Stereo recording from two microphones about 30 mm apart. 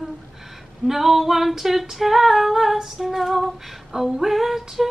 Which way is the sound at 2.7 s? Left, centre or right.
Centre.